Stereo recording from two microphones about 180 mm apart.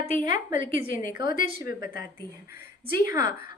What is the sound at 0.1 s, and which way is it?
A woman's voice, 45° left (ahead or behind).